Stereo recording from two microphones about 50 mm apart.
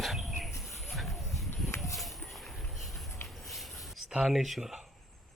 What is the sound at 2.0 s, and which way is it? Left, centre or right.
Vehicle, centre.